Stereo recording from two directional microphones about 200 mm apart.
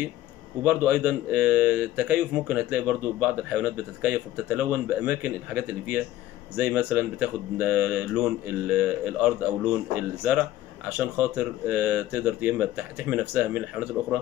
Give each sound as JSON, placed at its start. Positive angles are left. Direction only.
{"t": 0.7, "sound": "speech", "side_deg": -10}